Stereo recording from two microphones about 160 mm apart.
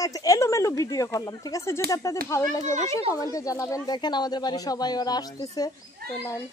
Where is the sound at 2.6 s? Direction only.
45° right (ahead or behind).